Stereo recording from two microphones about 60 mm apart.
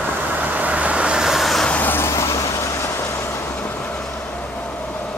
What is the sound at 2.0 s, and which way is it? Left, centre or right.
Vehicle, left.